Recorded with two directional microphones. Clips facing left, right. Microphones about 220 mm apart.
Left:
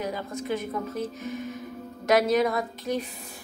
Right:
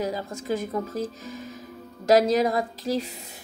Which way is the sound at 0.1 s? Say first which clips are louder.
Right 1 dB; 30° right (ahead or behind).